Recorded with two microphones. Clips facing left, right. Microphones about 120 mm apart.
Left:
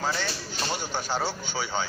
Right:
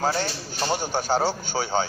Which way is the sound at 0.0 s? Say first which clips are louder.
Right 5 dB; 35° right (ahead or behind).